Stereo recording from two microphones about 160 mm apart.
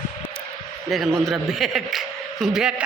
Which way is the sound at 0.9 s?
Centre (ahead or behind).